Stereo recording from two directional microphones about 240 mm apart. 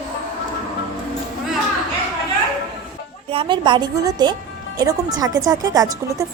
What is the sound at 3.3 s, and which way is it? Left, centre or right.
A woman's voice, right.